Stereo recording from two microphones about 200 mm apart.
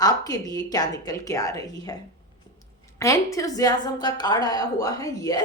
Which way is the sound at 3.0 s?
15° left (ahead or behind).